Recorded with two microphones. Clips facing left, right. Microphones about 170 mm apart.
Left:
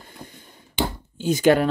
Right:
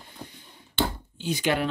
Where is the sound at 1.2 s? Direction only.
45° left (ahead or behind).